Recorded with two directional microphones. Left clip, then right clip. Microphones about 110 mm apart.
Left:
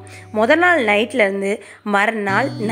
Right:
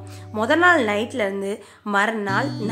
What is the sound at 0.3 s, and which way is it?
A woman's voice, 35° left (ahead or behind).